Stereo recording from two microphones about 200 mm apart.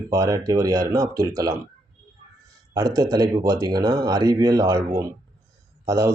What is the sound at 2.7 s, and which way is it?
A man's voice, 15° right (ahead or behind).